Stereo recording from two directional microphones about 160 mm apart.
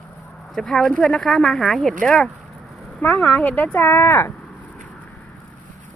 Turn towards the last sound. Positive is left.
turn(degrees=10)  # may be behind; listen again after turning